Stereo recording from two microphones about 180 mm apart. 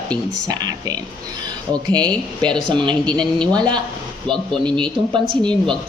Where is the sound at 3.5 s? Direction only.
25° right (ahead or behind).